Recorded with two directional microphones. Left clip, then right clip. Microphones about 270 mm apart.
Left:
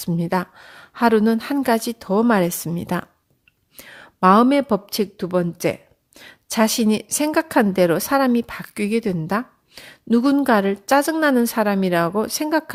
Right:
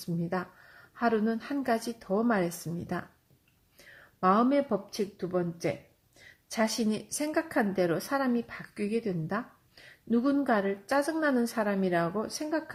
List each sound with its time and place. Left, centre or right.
0.0 s a woman's voice: left